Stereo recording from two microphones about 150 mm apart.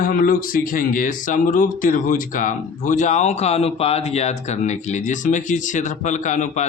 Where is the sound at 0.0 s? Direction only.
70° left (ahead or behind).